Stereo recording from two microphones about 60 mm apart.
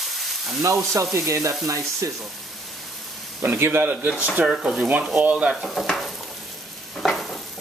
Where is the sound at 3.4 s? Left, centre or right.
Right.